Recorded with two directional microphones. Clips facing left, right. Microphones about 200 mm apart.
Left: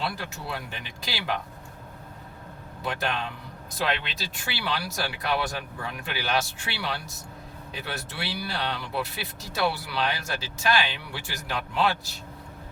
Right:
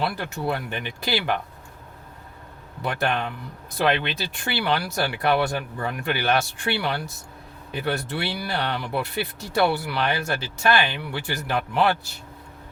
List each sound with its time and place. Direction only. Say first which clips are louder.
0.0 s speech: right 6 dB; 55° right (ahead or behind)
2.8 s speech: right 5 dB; 55° right (ahead or behind)